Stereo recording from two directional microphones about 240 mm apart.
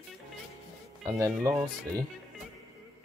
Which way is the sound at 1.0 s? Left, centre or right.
Centre.